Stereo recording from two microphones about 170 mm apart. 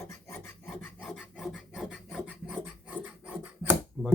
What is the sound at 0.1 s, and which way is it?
Filing, 15° left (ahead or behind).